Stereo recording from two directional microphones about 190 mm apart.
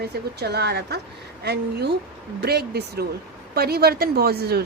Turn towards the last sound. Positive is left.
turn(degrees=-55)  # may be behind; listen again after turning